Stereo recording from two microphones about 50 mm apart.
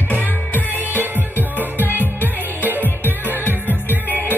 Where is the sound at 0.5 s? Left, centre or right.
Left.